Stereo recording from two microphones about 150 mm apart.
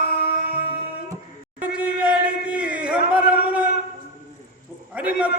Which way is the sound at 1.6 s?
10° right (ahead or behind).